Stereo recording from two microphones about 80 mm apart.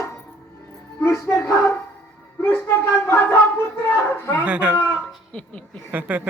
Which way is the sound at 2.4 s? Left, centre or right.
Left.